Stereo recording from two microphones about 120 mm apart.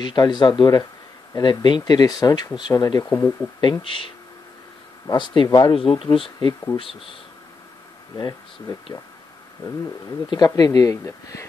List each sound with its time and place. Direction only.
0.0 s speech: 35° left (ahead or behind)
3.8 s speech: 45° left (ahead or behind)
5.1 s speech: 40° left (ahead or behind)
8.2 s speech: 35° left (ahead or behind)
10.3 s speech: 35° left (ahead or behind)